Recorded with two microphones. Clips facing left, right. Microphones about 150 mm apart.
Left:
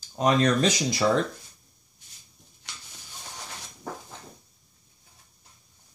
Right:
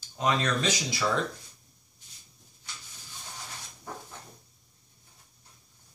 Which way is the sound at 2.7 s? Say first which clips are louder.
Left 1 dB; 80° left.